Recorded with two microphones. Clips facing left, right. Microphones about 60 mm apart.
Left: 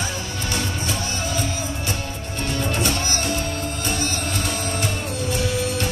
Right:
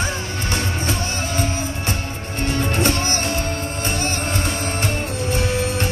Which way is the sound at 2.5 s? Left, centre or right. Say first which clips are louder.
Right 3 dB; right.